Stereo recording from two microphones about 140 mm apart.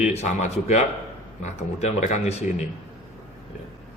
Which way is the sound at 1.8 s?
55° left (ahead or behind).